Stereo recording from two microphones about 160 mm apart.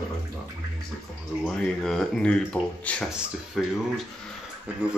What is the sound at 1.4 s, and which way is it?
Speech, 5° left (ahead or behind).